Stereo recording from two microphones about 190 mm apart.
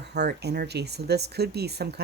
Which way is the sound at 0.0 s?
60° right (ahead or behind).